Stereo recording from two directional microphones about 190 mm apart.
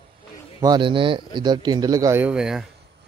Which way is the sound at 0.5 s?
20° right (ahead or behind).